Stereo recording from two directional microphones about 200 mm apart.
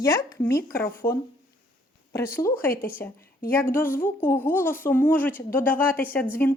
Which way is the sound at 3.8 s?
10° left (ahead or behind).